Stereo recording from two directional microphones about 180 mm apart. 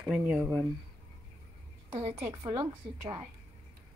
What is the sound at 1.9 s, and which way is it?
Speech, 35° right (ahead or behind).